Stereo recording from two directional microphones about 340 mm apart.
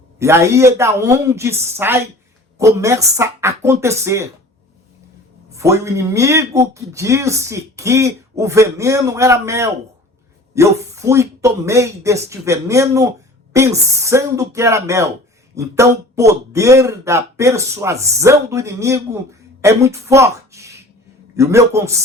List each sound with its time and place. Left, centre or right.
0.2 s speech: centre
5.5 s speech: centre